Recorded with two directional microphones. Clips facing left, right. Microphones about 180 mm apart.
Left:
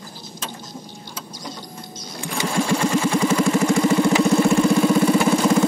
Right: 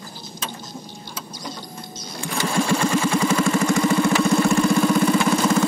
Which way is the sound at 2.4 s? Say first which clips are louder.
Even; 20° left (ahead or behind).